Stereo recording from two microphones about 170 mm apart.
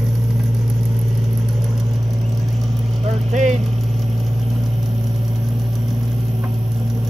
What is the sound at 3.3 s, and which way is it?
Vehicle, 45° right (ahead or behind).